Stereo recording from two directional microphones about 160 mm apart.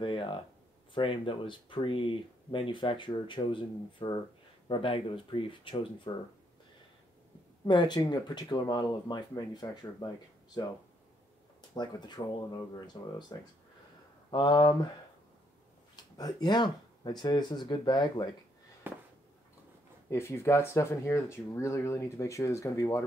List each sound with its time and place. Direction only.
0.0 s speech: 30° left (ahead or behind)
7.6 s speech: 30° left (ahead or behind)
11.7 s speech: 25° left (ahead or behind)
16.0 s speech: 25° left (ahead or behind)
18.9 s a sound: 10° right (ahead or behind)
20.1 s speech: 15° left (ahead or behind)